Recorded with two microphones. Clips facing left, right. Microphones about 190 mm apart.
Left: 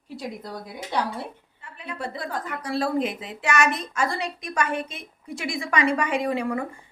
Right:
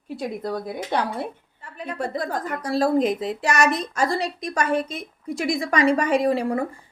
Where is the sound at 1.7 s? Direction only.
45° right (ahead or behind).